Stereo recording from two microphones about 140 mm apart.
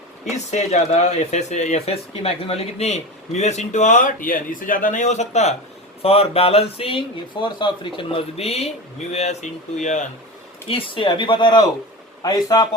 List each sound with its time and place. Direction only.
0.3 s speech: 55° left (ahead or behind)
10.7 s speech: 40° left (ahead or behind)